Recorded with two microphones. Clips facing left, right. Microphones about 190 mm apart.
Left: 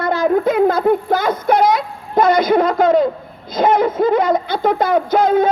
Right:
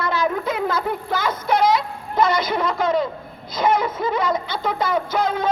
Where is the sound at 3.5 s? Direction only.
55° left (ahead or behind).